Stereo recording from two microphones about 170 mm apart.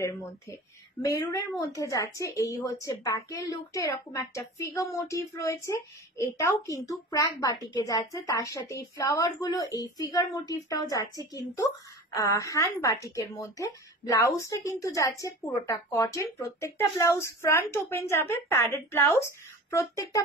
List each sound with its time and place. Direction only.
0.0 s a woman's voice: 15° left (ahead or behind)